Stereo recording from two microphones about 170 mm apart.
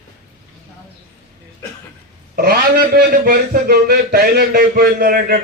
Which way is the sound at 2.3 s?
60° right (ahead or behind).